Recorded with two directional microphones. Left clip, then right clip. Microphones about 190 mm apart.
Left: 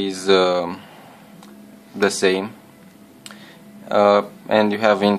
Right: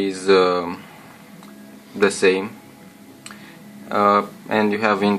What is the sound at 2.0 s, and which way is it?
Speech, 40° left (ahead or behind).